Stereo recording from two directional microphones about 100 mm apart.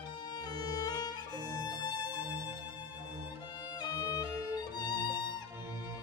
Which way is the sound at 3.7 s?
40° left (ahead or behind).